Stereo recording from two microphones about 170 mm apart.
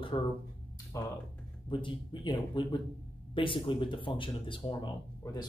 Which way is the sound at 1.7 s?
30° left (ahead or behind).